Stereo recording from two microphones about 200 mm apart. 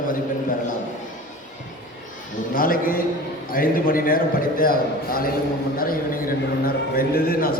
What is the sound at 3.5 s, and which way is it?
A man's voice, 45° left (ahead or behind).